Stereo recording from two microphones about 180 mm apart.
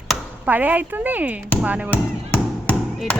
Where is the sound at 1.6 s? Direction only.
5° right (ahead or behind).